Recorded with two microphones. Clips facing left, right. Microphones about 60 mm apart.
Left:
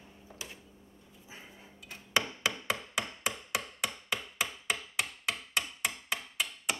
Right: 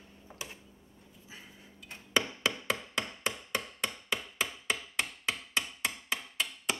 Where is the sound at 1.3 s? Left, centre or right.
Left.